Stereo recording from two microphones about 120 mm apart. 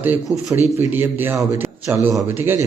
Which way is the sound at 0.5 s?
20° right (ahead or behind).